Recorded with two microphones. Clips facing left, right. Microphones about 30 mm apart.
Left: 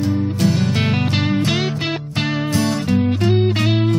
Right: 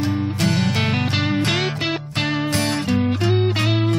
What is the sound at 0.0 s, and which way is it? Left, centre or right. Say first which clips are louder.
Music: left 2 dB; right.